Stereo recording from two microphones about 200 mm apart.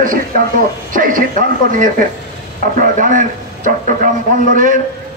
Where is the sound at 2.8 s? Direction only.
40° right (ahead or behind).